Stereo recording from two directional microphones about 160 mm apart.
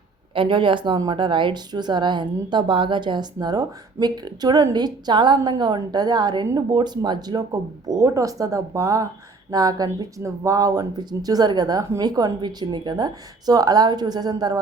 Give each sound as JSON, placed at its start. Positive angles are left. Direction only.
{"t": 0.3, "sound": "speech", "side_deg": -30}